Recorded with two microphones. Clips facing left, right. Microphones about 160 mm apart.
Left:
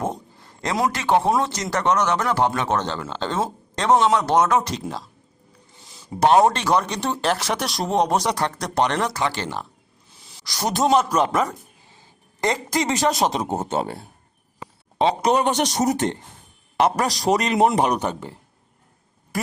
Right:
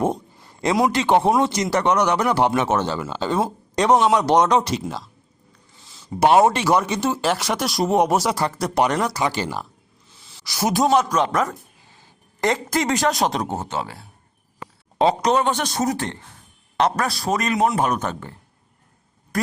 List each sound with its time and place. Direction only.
0.0 s a sound: 15° right (ahead or behind)
0.9 s speech: 20° right (ahead or behind)
4.8 s speech: centre (ahead or behind)
6.1 s a man's voice: 5° right (ahead or behind)
12.9 s speech: centre (ahead or behind)
13.4 s speech: 25° left (ahead or behind)
14.9 s a man's voice: 5° left (ahead or behind)